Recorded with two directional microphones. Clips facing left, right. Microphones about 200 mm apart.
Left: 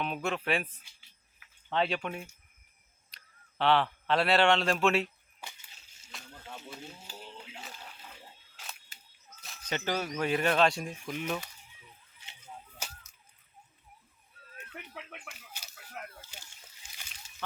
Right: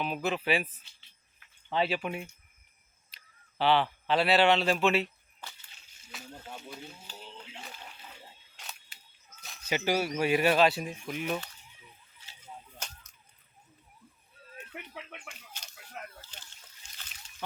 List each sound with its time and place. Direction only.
0.0 s speech: centre (ahead or behind)
1.7 s speech: 5° right (ahead or behind)
5.4 s whip: 10° left (ahead or behind)
6.1 s snake: centre (ahead or behind)
6.6 s speech: centre (ahead or behind)
7.2 s a sound: 10° left (ahead or behind)
9.4 s speech: centre (ahead or behind)
12.8 s whip: 5° left (ahead or behind)
14.9 s chicken: centre (ahead or behind)
16.8 s slosh: 5° left (ahead or behind)